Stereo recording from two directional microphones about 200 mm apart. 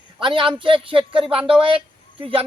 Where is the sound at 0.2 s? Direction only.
25° right (ahead or behind).